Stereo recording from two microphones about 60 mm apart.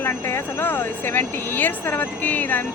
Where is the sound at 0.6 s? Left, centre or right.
Left.